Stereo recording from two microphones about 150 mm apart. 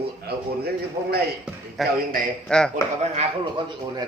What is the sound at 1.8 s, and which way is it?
Speech, centre (ahead or behind).